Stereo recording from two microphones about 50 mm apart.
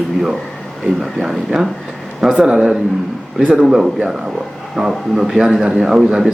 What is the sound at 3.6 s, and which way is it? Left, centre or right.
A man's voice, centre.